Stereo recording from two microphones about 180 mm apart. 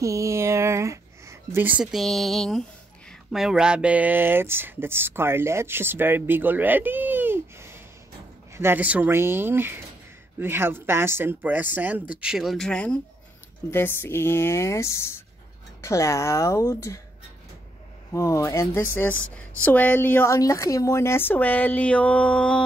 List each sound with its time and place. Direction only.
0.0 s a woman's voice: 15° right (ahead or behind); by 17.0 s 15° left (ahead or behind)
18.1 s a woman's voice: 15° left (ahead or behind)